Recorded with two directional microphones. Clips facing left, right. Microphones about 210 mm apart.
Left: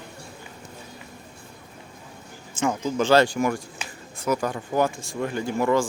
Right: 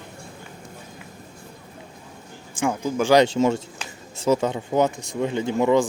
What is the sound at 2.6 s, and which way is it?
Speech, 10° right (ahead or behind).